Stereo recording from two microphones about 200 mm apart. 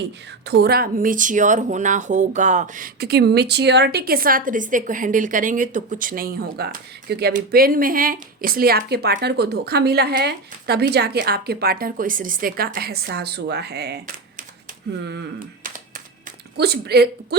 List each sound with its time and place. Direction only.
0.4 s speech: 55° right (ahead or behind)
16.6 s speech: 55° right (ahead or behind)